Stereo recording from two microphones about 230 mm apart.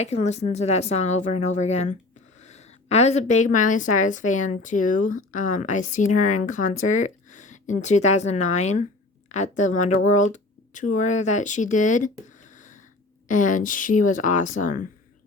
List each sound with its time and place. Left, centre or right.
0.0 s a woman's voice: left
12.5 s a sound: left
13.2 s a woman's voice: left